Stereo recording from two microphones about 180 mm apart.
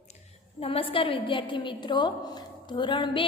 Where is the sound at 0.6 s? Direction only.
30° left (ahead or behind).